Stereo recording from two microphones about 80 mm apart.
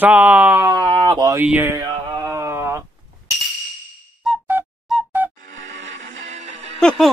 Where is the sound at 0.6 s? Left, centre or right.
Right.